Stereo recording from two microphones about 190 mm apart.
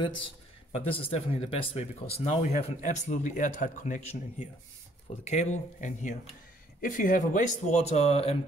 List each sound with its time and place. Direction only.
0.7 s speech: 30° left (ahead or behind)